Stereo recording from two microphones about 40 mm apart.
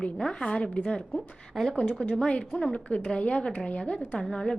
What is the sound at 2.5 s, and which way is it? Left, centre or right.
Speech, left.